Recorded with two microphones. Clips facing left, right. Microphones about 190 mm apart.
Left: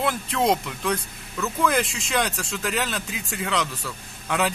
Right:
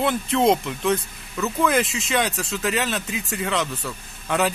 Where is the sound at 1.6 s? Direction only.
Centre (ahead or behind).